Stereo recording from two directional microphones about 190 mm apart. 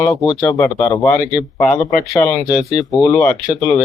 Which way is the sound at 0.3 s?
20° left (ahead or behind).